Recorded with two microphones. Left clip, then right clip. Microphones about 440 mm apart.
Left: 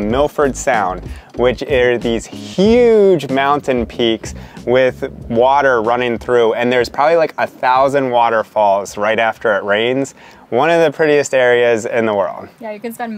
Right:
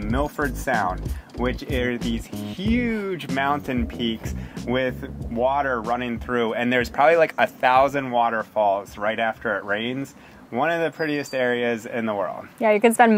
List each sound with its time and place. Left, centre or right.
0.1 s speech: left
12.6 s speech: right